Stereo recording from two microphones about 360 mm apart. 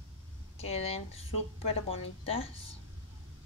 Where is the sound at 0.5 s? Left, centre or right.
Centre.